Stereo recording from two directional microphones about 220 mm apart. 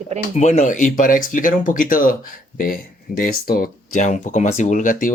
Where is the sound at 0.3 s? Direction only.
30° left (ahead or behind).